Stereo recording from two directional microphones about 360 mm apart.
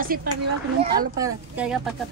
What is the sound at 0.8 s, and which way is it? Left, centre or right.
A woman's voice, centre.